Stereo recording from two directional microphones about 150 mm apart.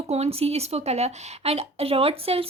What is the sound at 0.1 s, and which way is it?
A woman's voice, 45° right (ahead or behind).